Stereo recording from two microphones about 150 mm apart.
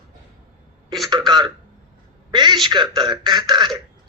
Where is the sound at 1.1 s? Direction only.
30° right (ahead or behind).